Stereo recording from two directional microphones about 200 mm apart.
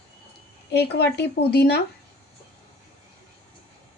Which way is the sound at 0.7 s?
55° left (ahead or behind).